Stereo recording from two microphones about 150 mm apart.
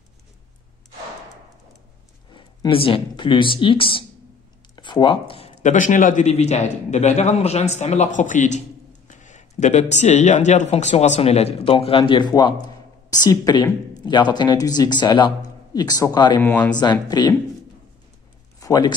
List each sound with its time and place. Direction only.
2.3 s speech: 35° left (ahead or behind)
5.6 s a man's voice: 55° left (ahead or behind); by 16.3 s 25° left (ahead or behind)
16.3 s speech: 10° left (ahead or behind)
16.7 s a man's voice: 30° left (ahead or behind)
18.6 s speech: 25° left (ahead or behind)